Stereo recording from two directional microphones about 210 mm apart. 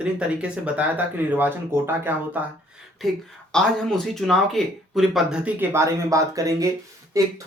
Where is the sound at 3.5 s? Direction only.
5° left (ahead or behind).